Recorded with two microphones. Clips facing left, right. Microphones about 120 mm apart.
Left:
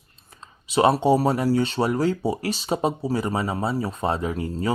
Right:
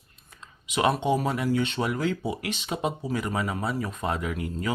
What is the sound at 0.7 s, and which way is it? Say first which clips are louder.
Speech: left 6 dB; 35° left (ahead or behind).